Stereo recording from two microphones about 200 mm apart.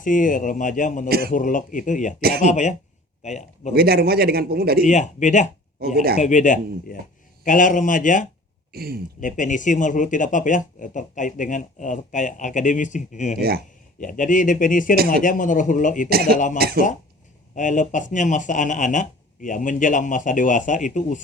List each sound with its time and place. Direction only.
0.0 s speech: 40° left (ahead or behind)
3.8 s a man's voice: 50° right (ahead or behind)
4.9 s speech: 35° left (ahead or behind)
8.7 s speech: 50° right (ahead or behind)
9.2 s speech: 40° left (ahead or behind)
16.0 s a man's voice: 50° right (ahead or behind)
17.5 s speech: 40° left (ahead or behind)